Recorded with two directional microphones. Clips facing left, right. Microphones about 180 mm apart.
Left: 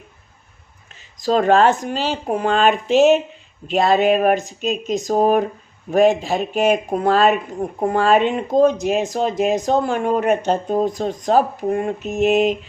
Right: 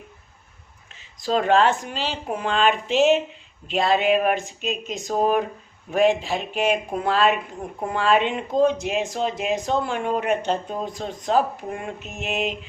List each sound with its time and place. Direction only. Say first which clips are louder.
1.2 s speech: left 4 dB; 45° left (ahead or behind)